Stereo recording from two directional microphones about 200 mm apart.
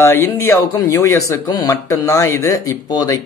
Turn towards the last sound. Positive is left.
turn(degrees=15)  # may be behind; listen again after turning